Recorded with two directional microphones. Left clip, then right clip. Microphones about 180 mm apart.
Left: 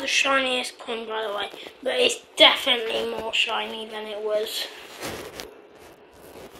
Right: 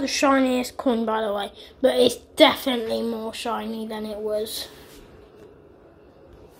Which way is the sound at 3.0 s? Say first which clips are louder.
Left 3 dB; 25° right (ahead or behind).